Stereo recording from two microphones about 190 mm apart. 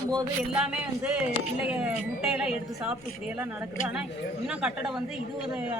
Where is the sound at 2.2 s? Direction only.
5° right (ahead or behind).